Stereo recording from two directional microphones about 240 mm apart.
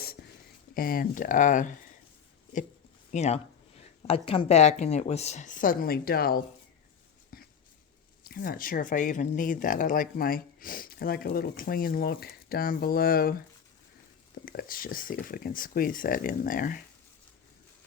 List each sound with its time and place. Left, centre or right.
0.7 s speech: left
3.1 s speech: left
8.2 s speech: left
14.4 s speech: left